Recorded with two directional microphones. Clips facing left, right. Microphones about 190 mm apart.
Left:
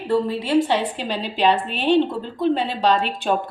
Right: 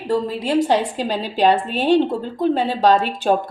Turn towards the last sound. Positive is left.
turn(degrees=-40)  # may be behind; listen again after turning